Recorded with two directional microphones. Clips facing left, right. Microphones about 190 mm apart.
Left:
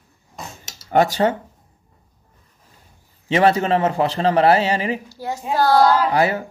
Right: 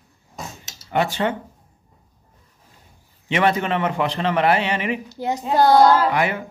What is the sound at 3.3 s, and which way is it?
A man's voice, 35° left (ahead or behind).